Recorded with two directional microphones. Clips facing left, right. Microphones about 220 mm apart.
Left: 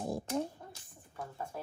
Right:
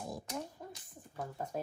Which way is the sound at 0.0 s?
30° left (ahead or behind).